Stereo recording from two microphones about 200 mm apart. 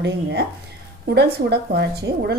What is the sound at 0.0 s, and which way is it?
A woman's voice, 60° right (ahead or behind).